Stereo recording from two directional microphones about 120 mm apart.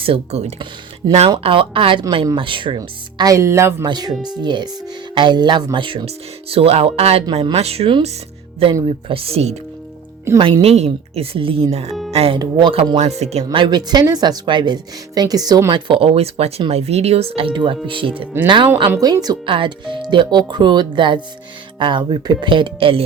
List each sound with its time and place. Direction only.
0.0 s speech: 55° right (ahead or behind)
1.4 s speech: 50° right (ahead or behind); by 3.8 s 20° right (ahead or behind)
3.8 s speech: 35° right (ahead or behind); by 9.6 s 60° right (ahead or behind)
10.3 s speech: 40° right (ahead or behind)
10.6 s speech: 60° right (ahead or behind)
12.4 s speech: 40° right (ahead or behind)
13.0 s speech: 60° right (ahead or behind); by 18.7 s 40° right (ahead or behind)
18.9 s speech: 30° right (ahead or behind)
19.5 s speech: 45° right (ahead or behind)